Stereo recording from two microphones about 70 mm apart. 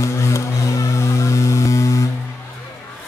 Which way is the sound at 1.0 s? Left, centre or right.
Left.